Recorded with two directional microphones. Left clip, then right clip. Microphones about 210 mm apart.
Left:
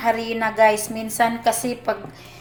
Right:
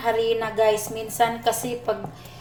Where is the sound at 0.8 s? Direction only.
30° left (ahead or behind).